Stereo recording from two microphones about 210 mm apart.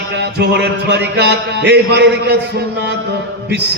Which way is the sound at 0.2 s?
55° right (ahead or behind).